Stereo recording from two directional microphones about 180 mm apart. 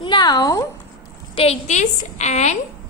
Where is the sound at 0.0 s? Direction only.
25° left (ahead or behind).